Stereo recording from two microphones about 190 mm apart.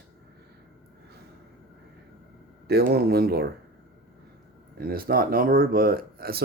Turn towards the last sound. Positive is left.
turn(degrees=-55)  # may be behind; listen again after turning